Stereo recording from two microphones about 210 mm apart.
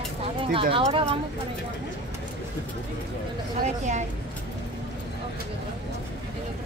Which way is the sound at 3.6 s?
35° right (ahead or behind).